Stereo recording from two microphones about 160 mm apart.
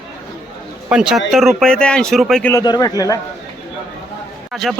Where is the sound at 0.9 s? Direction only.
5° right (ahead or behind).